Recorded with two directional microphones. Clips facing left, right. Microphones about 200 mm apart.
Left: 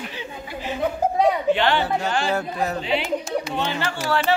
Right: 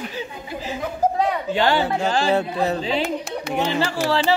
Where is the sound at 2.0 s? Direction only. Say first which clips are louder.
Right 4 dB; 30° right (ahead or behind).